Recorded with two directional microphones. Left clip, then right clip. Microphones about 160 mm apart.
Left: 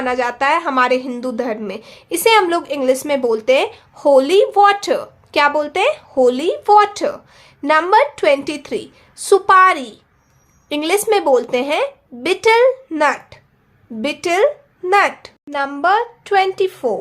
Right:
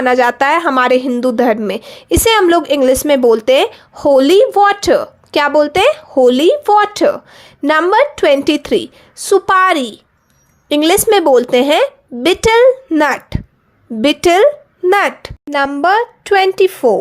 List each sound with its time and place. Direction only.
0.0 s a woman's voice: 50° right (ahead or behind)